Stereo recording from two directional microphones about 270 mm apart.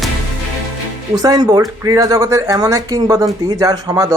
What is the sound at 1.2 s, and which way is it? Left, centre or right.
Speech, centre.